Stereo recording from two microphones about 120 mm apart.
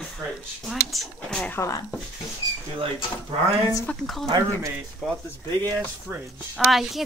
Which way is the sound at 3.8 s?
Centre (ahead or behind).